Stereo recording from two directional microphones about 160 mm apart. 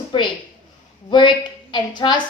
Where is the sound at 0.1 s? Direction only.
30° left (ahead or behind).